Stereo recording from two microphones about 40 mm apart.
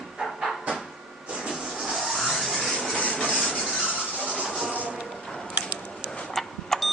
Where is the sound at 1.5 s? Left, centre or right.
Centre.